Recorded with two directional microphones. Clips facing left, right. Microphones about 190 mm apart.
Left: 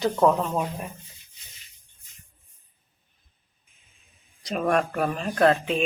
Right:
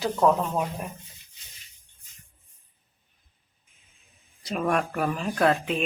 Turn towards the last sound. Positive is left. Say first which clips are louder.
# left 2 dB
turn(degrees=-5)  # may be behind; listen again after turning